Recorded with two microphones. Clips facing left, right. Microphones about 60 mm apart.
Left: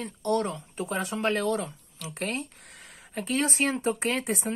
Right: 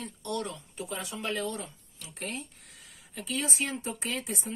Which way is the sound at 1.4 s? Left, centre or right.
Left.